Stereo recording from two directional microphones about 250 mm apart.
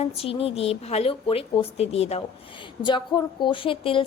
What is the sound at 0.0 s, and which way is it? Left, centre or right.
A woman's voice, left.